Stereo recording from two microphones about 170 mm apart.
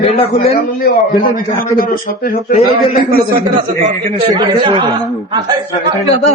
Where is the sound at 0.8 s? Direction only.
60° left (ahead or behind).